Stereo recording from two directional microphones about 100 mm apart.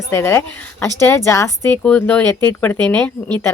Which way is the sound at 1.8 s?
15° left (ahead or behind).